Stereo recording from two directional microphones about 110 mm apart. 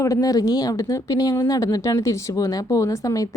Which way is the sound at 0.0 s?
30° left (ahead or behind).